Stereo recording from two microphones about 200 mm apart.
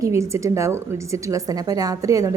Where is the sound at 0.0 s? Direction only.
15° right (ahead or behind).